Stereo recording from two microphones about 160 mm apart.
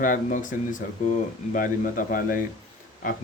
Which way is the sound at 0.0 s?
55° left (ahead or behind).